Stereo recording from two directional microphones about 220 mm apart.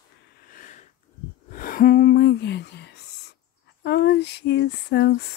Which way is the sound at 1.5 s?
40° left (ahead or behind).